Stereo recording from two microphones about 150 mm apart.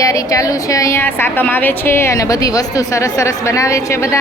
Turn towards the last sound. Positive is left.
turn(degrees=20)  # may be behind; listen again after turning